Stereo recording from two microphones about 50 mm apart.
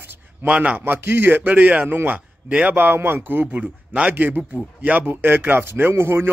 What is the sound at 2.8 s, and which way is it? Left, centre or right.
Speech, right.